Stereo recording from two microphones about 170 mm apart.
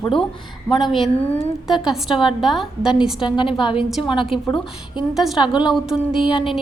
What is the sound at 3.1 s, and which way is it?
Speech, 30° left (ahead or behind).